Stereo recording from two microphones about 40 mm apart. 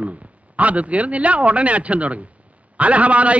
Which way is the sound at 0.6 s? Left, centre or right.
Right.